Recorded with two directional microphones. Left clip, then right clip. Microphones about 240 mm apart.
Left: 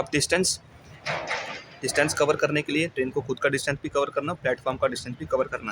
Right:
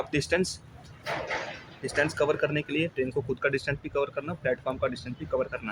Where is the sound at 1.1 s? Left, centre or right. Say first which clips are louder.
Left 3 dB; left.